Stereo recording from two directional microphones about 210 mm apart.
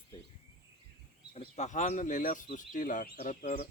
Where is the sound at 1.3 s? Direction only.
35° left (ahead or behind).